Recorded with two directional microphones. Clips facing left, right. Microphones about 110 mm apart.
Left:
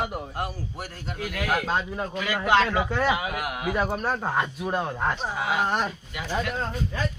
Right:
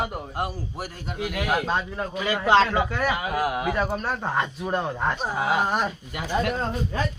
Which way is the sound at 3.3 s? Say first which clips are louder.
Right 5 dB; 30° right (ahead or behind).